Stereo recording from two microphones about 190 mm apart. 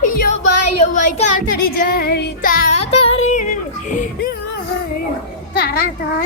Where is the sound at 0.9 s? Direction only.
40° left (ahead or behind).